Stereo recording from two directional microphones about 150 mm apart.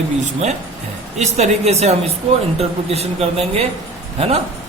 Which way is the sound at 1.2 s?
45° right (ahead or behind).